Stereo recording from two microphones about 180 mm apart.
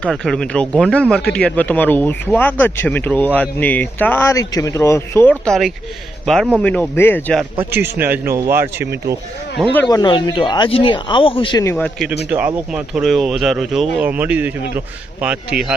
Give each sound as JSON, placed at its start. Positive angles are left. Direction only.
{"t": 0.0, "sound": "speech", "side_deg": 5}
{"t": 7.8, "sound": "speech", "side_deg": -10}
{"t": 9.6, "sound": "speech", "side_deg": 0}
{"t": 9.9, "sound": "speech", "side_deg": 25}
{"t": 11.6, "sound": "speech", "side_deg": 15}
{"t": 12.7, "sound": "speech", "side_deg": -5}